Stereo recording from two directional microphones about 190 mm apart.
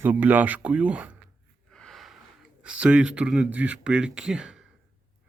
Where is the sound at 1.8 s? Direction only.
Centre (ahead or behind).